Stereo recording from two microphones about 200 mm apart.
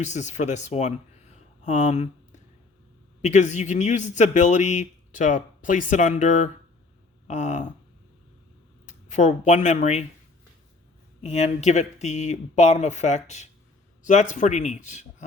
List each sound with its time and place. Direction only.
0.0 s speech: 35° left (ahead or behind)
8.9 s speech: 35° left (ahead or behind)
11.2 s speech: 35° left (ahead or behind)